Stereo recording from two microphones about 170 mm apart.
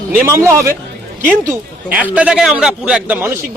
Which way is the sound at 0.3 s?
15° right (ahead or behind).